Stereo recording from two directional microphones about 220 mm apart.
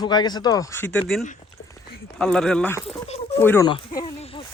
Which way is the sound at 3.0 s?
25° left (ahead or behind).